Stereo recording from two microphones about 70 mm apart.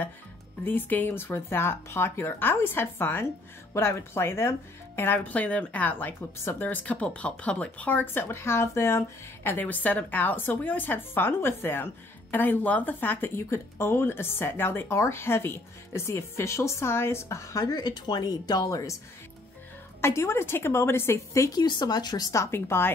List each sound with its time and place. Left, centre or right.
0.7 s speech: left
20.0 s speech: left
21.5 s speech: left
22.3 s speech: left